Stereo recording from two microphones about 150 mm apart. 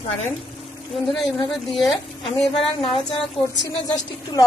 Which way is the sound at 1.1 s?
Centre (ahead or behind).